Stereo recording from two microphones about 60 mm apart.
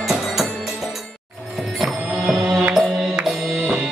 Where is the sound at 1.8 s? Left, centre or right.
Centre.